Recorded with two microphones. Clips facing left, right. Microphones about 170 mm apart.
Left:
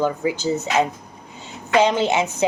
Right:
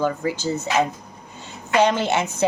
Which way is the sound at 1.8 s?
15° left (ahead or behind).